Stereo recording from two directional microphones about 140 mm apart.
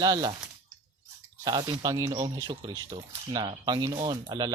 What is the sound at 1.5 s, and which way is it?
Speech, 30° right (ahead or behind).